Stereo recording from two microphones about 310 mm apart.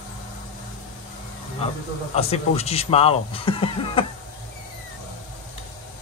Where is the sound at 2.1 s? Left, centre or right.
Centre.